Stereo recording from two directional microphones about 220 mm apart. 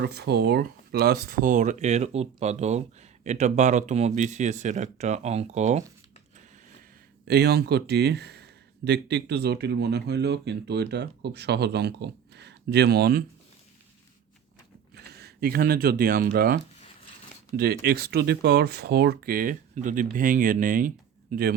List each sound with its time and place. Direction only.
0.0 s speech: 50° right (ahead or behind); by 5.8 s 30° right (ahead or behind)
7.3 s speech: 45° right (ahead or behind)
15.1 s speech: 45° right (ahead or behind)
17.6 s speech: 45° right (ahead or behind)